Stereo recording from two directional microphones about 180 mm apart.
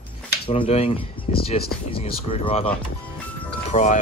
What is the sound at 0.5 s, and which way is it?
Speech, 35° left (ahead or behind).